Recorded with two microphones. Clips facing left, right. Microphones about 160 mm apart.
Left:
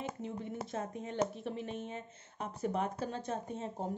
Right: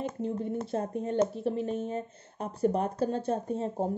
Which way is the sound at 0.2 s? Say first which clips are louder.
Right 8 dB; 40° right (ahead or behind).